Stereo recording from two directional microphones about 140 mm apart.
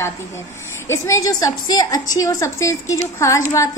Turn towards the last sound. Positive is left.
turn(degrees=20)  # may be behind; listen again after turning